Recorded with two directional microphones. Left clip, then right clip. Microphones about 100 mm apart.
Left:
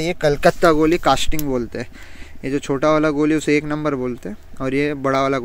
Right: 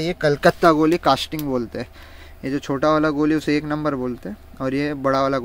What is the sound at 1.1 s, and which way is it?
Speech, 20° left (ahead or behind).